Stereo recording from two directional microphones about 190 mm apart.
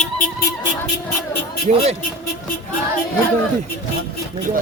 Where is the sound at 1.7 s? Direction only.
35° right (ahead or behind).